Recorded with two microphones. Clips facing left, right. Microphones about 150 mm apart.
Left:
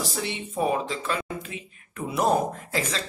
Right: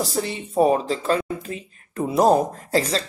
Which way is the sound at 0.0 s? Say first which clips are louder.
Right 5 dB; 40° right (ahead or behind).